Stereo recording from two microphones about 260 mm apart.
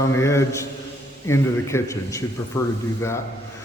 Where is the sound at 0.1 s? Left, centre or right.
Centre.